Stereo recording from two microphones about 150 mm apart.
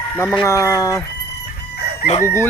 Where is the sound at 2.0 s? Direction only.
50° left (ahead or behind).